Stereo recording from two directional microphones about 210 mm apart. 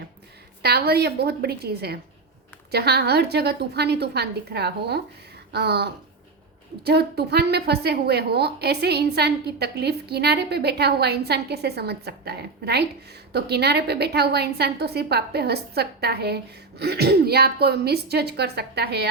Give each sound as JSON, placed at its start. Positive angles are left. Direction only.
{"t": 0.6, "sound": "a woman's voice", "side_deg": -50}